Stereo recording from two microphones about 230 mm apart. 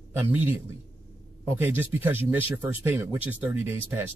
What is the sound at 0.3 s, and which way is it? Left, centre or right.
Speech, centre.